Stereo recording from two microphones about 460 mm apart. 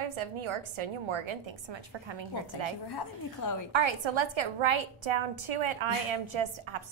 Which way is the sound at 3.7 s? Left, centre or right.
Right.